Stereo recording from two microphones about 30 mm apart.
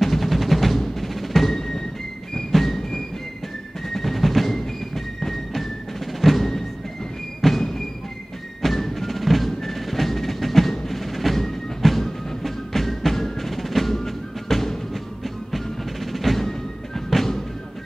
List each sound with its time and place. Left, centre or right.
0.0 s music: centre
1.5 s music: centre
3.9 s drum: centre
4.6 s music: centre
8.6 s percussion: centre
12.4 s music: centre